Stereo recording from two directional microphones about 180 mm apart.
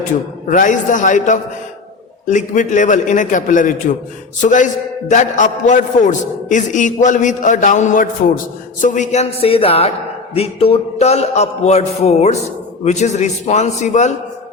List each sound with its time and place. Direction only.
0.4 s a man's voice: 45° left (ahead or behind)